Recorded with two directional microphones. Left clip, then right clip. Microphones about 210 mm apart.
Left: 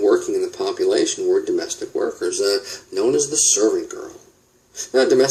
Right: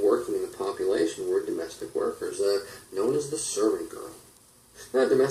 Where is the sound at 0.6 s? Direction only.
40° left (ahead or behind).